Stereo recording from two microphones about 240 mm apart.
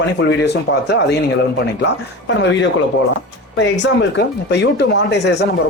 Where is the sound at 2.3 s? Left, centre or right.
Left.